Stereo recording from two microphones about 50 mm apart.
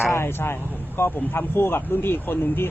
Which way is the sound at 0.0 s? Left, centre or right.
Left.